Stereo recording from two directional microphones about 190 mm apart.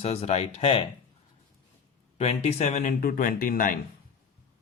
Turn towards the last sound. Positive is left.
turn(degrees=45)  # may be behind; listen again after turning